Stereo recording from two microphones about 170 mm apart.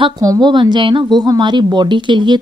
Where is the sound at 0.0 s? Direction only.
20° right (ahead or behind).